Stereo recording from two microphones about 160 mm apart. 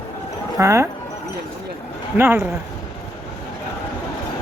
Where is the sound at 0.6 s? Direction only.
20° right (ahead or behind).